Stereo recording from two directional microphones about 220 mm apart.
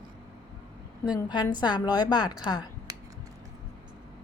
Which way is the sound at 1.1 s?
20° left (ahead or behind).